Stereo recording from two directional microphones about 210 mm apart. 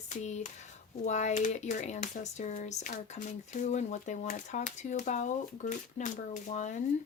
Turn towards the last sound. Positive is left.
turn(degrees=35)  # may be behind; listen again after turning